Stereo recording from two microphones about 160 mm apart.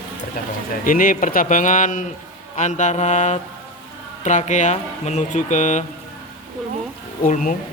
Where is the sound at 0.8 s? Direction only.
60° left (ahead or behind).